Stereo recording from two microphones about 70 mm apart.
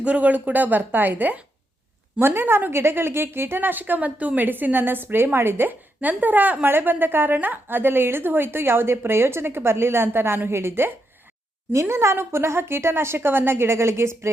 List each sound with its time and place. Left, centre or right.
0.0 s a woman's voice: centre; by 14.3 s right